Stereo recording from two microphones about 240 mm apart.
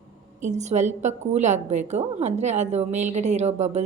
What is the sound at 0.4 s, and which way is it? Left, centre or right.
A woman's voice, right.